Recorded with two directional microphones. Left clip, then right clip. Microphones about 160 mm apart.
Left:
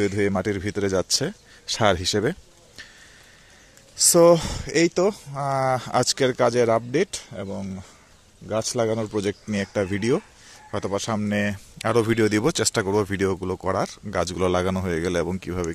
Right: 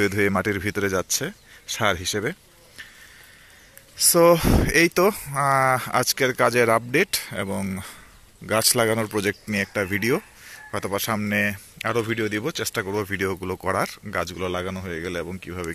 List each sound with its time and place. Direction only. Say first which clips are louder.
0.0 s speech: right 2 dB; 10° left (ahead or behind)
4.0 s speech: left 1 dB; 20° left (ahead or behind); by 5.6 s centre (ahead or behind)
5.6 s speech: right 1 dB; 15° left (ahead or behind)
7.3 s speech: right 4 dB; 5° right (ahead or behind); by 13.9 s 15° left (ahead or behind)
14.1 s speech: left 5 dB; 35° left (ahead or behind)